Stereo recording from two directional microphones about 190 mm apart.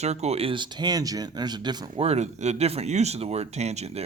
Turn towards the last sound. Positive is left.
turn(degrees=-35)  # may be behind; listen again after turning